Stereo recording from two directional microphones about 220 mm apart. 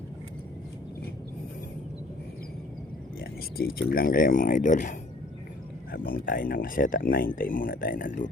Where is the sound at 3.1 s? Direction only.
45° left (ahead or behind).